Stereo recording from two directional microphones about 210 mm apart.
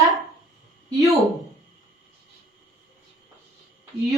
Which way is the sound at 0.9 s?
15° right (ahead or behind).